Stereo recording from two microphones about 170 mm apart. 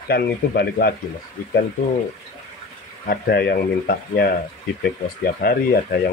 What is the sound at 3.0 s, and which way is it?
Speech, 70° left (ahead or behind).